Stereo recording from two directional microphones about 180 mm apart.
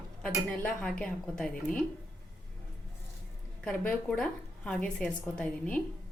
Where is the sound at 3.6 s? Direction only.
5° left (ahead or behind).